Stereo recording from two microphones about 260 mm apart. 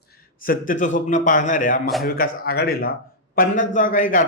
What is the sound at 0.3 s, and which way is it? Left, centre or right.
A man's voice, left.